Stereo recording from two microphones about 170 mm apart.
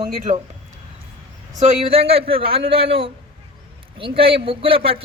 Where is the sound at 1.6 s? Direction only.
35° right (ahead or behind).